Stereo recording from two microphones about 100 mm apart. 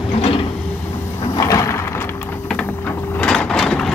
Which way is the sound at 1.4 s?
35° left (ahead or behind).